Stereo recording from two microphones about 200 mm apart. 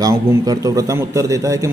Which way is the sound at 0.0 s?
15° right (ahead or behind).